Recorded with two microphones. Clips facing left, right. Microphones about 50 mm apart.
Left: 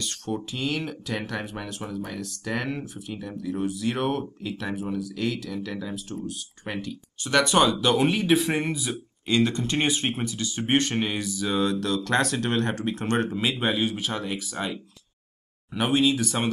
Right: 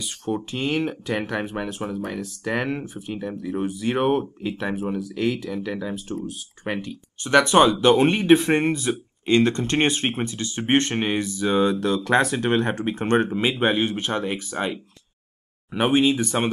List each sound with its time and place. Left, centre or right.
0.0 s speech: centre
1.8 s speech: centre
2.0 s speech: centre
8.9 s speech: right
11.4 s speech: centre
16.0 s speech: centre